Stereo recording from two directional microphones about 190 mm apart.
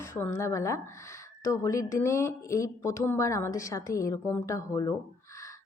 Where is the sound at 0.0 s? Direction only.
15° left (ahead or behind).